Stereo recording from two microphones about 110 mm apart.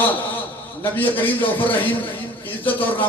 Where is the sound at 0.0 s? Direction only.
15° left (ahead or behind).